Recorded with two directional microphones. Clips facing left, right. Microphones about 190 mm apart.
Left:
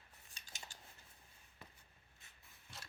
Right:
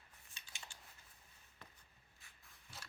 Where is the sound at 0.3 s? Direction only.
40° left (ahead or behind).